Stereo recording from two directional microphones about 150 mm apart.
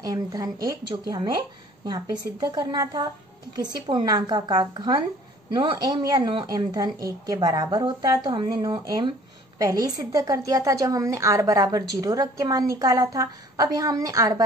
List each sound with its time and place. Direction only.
0.0 s a woman's voice: 25° right (ahead or behind)
2.4 s a woman's voice: 25° right (ahead or behind)